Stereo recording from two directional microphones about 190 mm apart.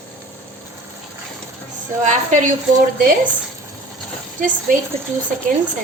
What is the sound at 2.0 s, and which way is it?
Speech, 40° right (ahead or behind).